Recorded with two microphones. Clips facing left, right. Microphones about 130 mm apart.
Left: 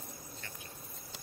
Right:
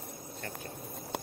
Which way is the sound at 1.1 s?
65° right (ahead or behind).